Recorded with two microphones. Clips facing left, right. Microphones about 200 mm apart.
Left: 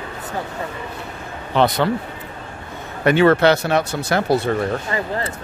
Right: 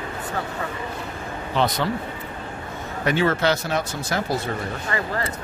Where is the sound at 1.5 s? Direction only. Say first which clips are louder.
Left 5 dB; 65° left (ahead or behind).